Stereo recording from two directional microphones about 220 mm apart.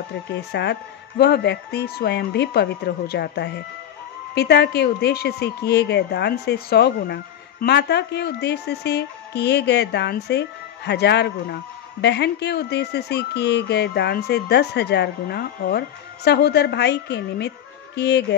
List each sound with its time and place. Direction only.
0.5 s speech: 50° left (ahead or behind)